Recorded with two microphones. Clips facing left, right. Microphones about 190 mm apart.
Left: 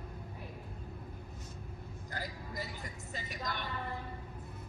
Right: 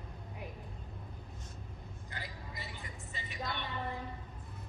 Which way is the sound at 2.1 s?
40° left (ahead or behind).